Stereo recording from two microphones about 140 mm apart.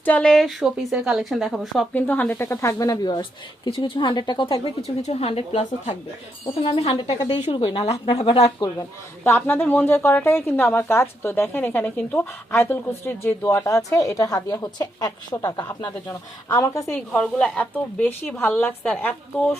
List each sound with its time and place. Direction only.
0.0 s a woman's voice: 10° left (ahead or behind)
1.9 s speech: 10° left (ahead or behind); by 6.9 s 50° left (ahead or behind)
7.5 s speech: 35° left (ahead or behind)
9.2 s a woman's voice: 15° left (ahead or behind)
17.1 s a woman's voice: 5° left (ahead or behind)